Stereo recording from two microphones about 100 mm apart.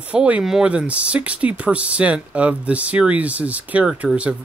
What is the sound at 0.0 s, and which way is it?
Speech, 15° right (ahead or behind).